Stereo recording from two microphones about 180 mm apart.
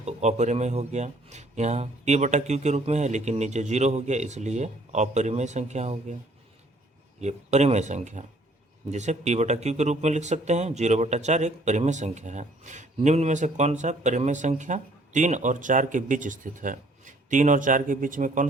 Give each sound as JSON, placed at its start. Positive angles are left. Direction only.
{"t": 0.0, "sound": "speech", "side_deg": -40}
{"t": 7.2, "sound": "speech", "side_deg": -40}